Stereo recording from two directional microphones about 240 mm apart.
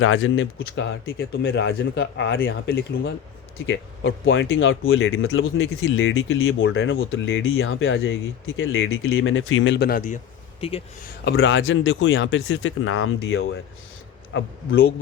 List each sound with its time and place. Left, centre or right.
0.0 s speech: left
10.6 s speech: left
11.3 s speech: left